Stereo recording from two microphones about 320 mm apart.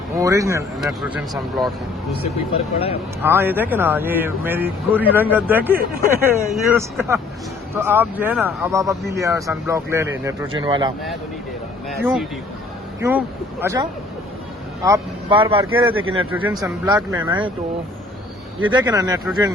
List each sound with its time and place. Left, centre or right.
0.2 s speech: centre
2.7 s speech: centre
3.2 s speech: centre
6.1 s speech: centre
6.7 s speech: centre
11.9 s speech: centre
14.8 s speech: centre
16.1 s speech: centre
18.6 s speech: centre